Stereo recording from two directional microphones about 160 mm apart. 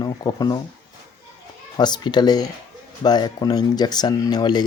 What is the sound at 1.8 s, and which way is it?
Speech, 25° left (ahead or behind).